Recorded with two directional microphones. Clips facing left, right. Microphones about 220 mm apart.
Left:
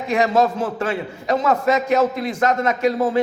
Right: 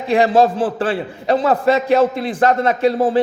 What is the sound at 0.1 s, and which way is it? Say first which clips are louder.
A man's voice: right 4 dB; 30° right (ahead or behind).